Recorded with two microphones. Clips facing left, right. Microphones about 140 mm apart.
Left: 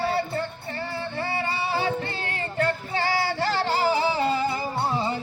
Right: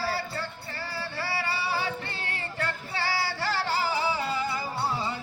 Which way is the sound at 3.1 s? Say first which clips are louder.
Left 4 dB; 20° left (ahead or behind).